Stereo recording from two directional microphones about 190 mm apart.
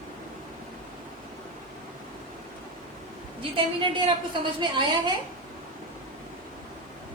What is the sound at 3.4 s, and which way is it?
A woman's voice, 25° right (ahead or behind).